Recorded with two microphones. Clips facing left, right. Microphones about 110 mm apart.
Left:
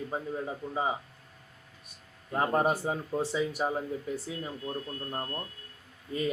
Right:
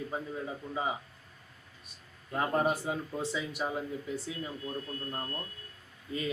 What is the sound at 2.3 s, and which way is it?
A man's voice, 30° left (ahead or behind).